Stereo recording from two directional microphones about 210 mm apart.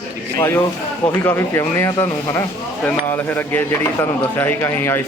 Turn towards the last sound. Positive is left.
turn(degrees=10)  # may be behind; listen again after turning